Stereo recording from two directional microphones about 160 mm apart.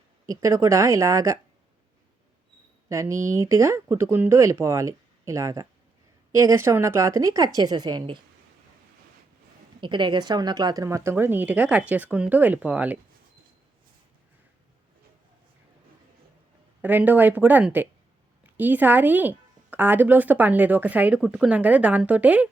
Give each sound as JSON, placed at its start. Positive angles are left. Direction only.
{"t": 0.3, "sound": "a woman's voice", "side_deg": -20}
{"t": 2.9, "sound": "a woman's voice", "side_deg": -20}
{"t": 9.8, "sound": "speech", "side_deg": -30}
{"t": 16.8, "sound": "speech", "side_deg": -10}